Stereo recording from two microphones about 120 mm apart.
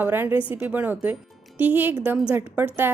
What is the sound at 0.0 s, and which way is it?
A woman's voice, 15° right (ahead or behind).